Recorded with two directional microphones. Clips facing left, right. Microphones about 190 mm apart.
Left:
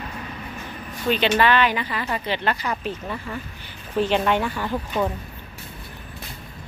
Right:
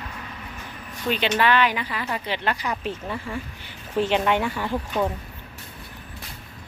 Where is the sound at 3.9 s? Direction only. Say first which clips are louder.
Left 1 dB; 20° right (ahead or behind).